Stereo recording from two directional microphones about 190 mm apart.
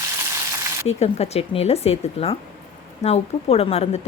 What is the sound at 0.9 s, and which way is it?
A woman's voice, 35° left (ahead or behind).